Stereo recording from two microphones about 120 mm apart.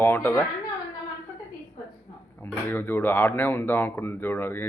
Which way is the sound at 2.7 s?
15° left (ahead or behind).